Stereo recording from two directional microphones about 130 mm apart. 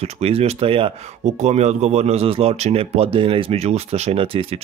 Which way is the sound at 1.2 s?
60° right (ahead or behind).